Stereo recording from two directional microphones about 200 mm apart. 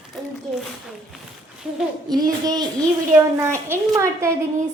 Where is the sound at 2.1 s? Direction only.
20° right (ahead or behind).